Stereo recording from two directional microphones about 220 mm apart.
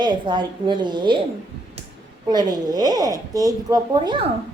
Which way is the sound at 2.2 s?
20° right (ahead or behind).